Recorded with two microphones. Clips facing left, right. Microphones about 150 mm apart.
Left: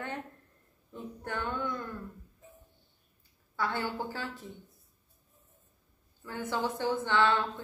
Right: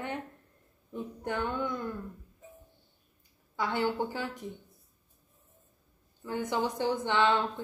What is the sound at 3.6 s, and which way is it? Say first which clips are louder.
Speech: right 3 dB; 15° right (ahead or behind).